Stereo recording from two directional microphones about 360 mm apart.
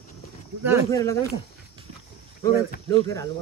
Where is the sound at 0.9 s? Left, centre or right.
Centre.